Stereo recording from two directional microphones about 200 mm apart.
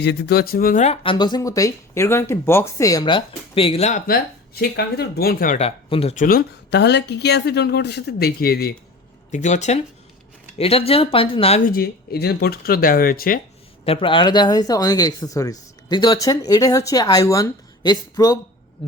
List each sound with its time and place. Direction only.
0.0 s speech: 55° left (ahead or behind)
5.5 s speech: 30° left (ahead or behind)
6.2 s speech: 55° left (ahead or behind)
9.3 s speech: 35° left (ahead or behind)
11.6 s speech: 45° left (ahead or behind)
13.8 s speech: 25° left (ahead or behind)